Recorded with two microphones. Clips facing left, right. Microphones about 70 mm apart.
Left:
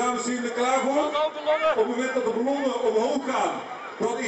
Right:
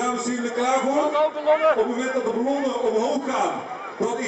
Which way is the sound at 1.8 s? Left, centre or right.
Centre.